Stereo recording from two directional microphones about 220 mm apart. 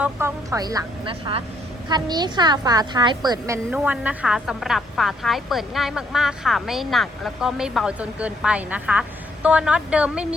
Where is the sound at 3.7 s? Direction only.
5° right (ahead or behind).